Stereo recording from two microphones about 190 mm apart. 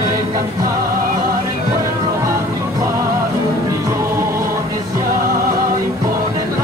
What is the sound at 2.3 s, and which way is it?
Music, 15° right (ahead or behind).